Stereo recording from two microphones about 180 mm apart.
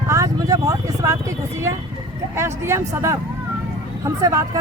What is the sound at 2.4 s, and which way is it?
Speech, 15° right (ahead or behind).